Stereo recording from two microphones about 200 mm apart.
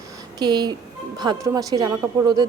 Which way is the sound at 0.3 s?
20° right (ahead or behind).